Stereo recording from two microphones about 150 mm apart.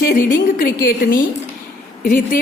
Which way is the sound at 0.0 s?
75° left (ahead or behind).